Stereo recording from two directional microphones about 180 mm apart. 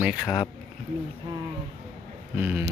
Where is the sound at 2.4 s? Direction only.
10° right (ahead or behind).